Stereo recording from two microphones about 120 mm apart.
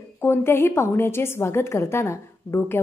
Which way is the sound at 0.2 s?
20° left (ahead or behind).